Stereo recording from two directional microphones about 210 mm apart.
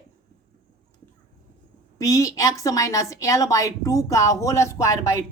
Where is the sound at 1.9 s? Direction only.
15° left (ahead or behind).